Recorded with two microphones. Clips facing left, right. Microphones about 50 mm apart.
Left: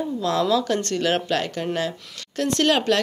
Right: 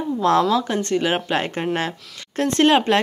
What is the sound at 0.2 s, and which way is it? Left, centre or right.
Speech, right.